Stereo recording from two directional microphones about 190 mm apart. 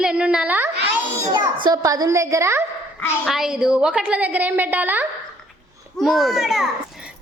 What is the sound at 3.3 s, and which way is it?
A woman's voice, centre (ahead or behind).